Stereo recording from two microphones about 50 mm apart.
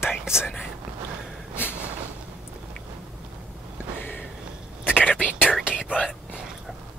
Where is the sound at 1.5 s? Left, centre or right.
Left.